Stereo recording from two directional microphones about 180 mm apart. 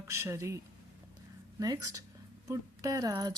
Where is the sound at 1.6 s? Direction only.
20° right (ahead or behind).